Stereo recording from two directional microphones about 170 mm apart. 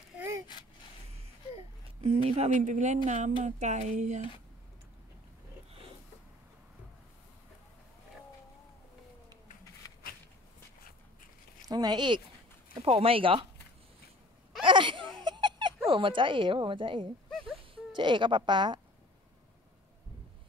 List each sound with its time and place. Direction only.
2.0 s speech: 40° right (ahead or behind)
11.6 s speech: 25° right (ahead or behind)
14.6 s a sound: 30° right (ahead or behind)
15.9 s a woman's voice: 30° right (ahead or behind)
17.3 s a sound: centre (ahead or behind)
17.9 s a woman's voice: 30° right (ahead or behind)